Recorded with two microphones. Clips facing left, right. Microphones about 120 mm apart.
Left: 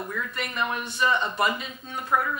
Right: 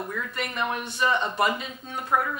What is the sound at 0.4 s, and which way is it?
A woman's voice, 45° right (ahead or behind).